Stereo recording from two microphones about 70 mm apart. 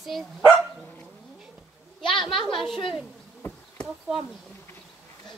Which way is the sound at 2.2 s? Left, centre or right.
Centre.